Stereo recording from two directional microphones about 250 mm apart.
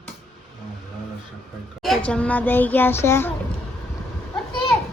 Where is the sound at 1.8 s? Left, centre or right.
Centre.